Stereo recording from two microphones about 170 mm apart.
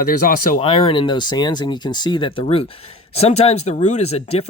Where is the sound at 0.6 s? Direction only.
35° left (ahead or behind).